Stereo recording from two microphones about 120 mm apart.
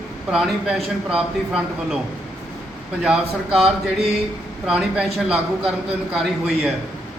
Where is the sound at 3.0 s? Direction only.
5° right (ahead or behind).